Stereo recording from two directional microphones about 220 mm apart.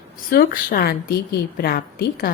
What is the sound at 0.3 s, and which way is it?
A woman's voice, 40° left (ahead or behind).